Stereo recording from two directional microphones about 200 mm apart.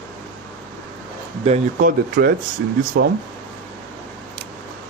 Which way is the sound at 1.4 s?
35° right (ahead or behind).